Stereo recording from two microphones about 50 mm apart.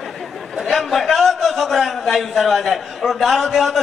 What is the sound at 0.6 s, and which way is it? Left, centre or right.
A man's voice, centre.